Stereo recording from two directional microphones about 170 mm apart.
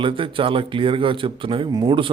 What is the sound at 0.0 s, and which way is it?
Speech, 30° right (ahead or behind).